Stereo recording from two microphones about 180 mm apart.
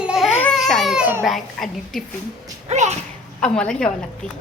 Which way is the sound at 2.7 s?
40° right (ahead or behind).